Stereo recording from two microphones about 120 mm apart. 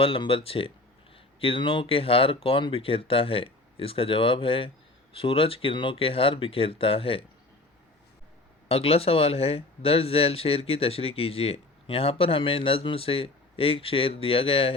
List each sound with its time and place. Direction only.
0.0 s speech: 50° left (ahead or behind)
8.7 s speech: 55° left (ahead or behind)